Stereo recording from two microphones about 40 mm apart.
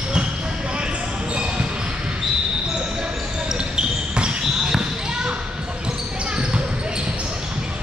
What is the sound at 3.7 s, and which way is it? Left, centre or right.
Basketball bounce, right.